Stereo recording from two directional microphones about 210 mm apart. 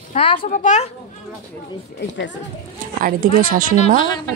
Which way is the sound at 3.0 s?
40° right (ahead or behind).